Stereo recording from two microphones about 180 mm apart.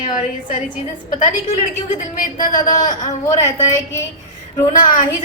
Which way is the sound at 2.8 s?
40° left (ahead or behind).